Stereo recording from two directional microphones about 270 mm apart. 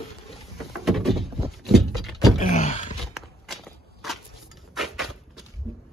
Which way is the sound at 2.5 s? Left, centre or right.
Left.